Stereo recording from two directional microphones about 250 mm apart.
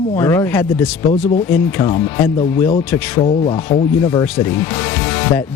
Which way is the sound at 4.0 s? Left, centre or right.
Centre.